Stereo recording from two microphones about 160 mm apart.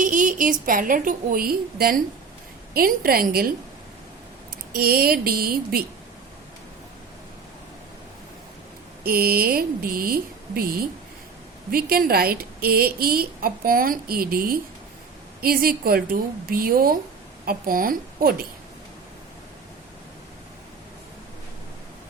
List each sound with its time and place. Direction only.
0.0 s a woman's voice: 55° right (ahead or behind)
4.7 s a woman's voice: 70° right (ahead or behind)
9.0 s a woman's voice: 70° right (ahead or behind)